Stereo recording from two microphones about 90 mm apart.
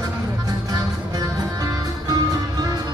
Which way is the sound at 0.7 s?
45° right (ahead or behind).